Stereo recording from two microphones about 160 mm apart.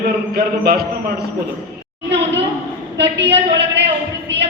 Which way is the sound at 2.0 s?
90° right.